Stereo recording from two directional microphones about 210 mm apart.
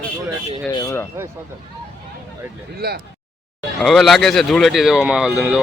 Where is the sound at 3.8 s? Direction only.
Centre (ahead or behind).